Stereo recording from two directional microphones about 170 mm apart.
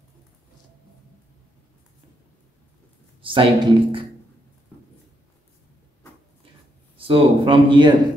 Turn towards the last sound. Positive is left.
turn(degrees=-30)  # may be behind; listen again after turning